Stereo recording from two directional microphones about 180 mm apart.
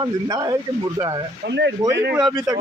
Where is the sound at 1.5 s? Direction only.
75° right (ahead or behind).